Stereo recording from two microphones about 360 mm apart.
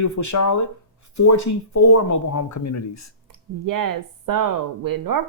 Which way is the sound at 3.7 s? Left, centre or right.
Right.